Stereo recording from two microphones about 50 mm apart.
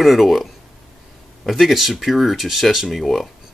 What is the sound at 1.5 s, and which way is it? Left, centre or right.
Speech, centre.